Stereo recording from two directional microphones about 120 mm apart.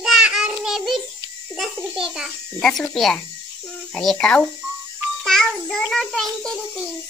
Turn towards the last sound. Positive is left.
turn(degrees=0)  # may be behind; listen again after turning